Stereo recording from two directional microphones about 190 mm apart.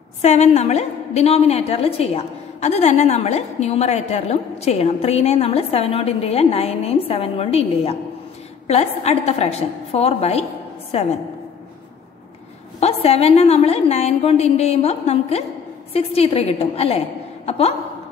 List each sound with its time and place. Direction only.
0.2 s a woman's voice: 35° left (ahead or behind)
12.8 s a woman's voice: 35° left (ahead or behind)